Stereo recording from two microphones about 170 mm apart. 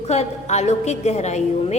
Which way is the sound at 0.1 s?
40° left (ahead or behind).